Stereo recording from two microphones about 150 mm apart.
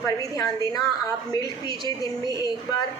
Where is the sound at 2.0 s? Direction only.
25° left (ahead or behind).